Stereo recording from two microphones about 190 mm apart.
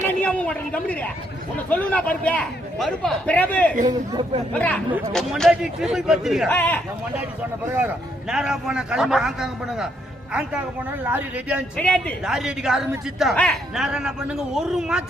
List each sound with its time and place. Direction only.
0.1 s a man's voice: 10° left (ahead or behind)
3.8 s speech: 25° right (ahead or behind)
4.5 s a man's voice: 5° left (ahead or behind)
6.5 s a man's voice: 10° left (ahead or behind)
7.8 s a man's voice: 5° right (ahead or behind)
11.0 s speech: 10° right (ahead or behind)
11.8 s a man's voice: 5° left (ahead or behind)